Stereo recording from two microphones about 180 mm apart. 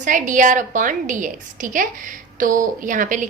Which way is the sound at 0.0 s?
45° right (ahead or behind).